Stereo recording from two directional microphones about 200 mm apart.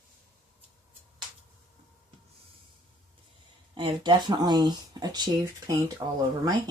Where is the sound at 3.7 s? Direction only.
20° right (ahead or behind).